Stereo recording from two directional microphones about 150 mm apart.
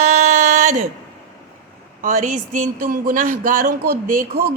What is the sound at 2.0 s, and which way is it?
Speech, 55° right (ahead or behind).